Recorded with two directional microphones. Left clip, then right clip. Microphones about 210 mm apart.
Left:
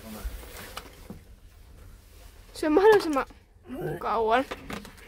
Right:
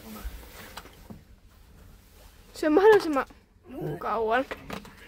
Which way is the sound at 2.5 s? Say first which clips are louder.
Right 1 dB; 5° right (ahead or behind).